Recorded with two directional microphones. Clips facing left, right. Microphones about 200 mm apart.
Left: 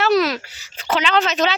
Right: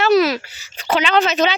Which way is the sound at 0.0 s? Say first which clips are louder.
Right 3 dB; 5° right (ahead or behind).